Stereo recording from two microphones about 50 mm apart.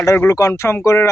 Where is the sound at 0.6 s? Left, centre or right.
Left.